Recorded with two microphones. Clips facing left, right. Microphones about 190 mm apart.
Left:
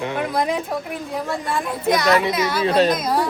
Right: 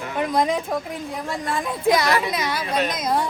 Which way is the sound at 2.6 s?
30° left (ahead or behind).